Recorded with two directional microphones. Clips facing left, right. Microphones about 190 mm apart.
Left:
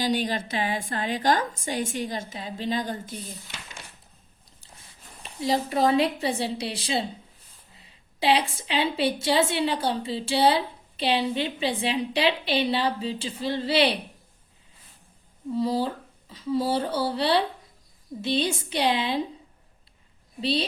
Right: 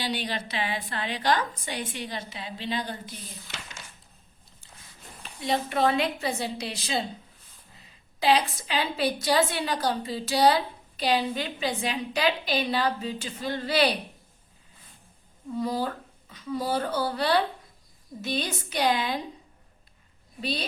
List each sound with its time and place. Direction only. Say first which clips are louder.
0.0 s a woman's voice: left 5 dB; 45° left (ahead or behind)
5.4 s a woman's voice: left 2 dB; 30° left (ahead or behind)
15.5 s a woman's voice: left 3 dB; 30° left (ahead or behind)
20.4 s a woman's voice: left 5 dB; 30° left (ahead or behind)